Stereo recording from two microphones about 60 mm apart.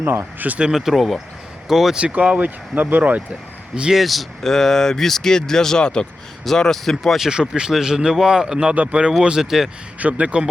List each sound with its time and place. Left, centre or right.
0.0 s speech: right
0.6 s speech: centre
2.0 s speech: centre
3.8 s speech: centre
4.0 s speech: centre
7.2 s speech: centre
10.0 s speech: right